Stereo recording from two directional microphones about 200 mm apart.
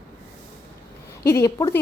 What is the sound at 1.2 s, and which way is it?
Speech, 15° left (ahead or behind).